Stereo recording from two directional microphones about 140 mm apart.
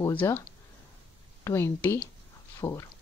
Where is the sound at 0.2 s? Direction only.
20° left (ahead or behind).